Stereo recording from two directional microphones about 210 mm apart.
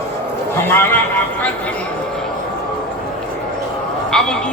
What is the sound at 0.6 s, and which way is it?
Speech, 10° left (ahead or behind).